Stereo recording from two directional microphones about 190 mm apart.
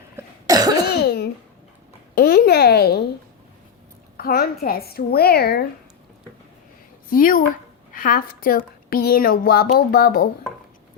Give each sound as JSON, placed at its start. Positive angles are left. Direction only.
{"t": 0.2, "sound": "cough", "side_deg": -20}
{"t": 0.9, "sound": "cough", "side_deg": 55}
{"t": 2.1, "sound": "speech", "side_deg": 50}
{"t": 4.2, "sound": "a woman's voice", "side_deg": 55}
{"t": 7.1, "sound": "speech", "side_deg": 45}